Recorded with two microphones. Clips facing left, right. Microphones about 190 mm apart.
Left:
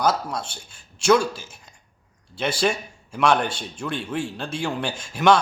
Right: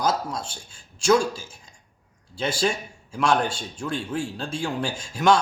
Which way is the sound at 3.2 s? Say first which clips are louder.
Left 2 dB; 65° left (ahead or behind).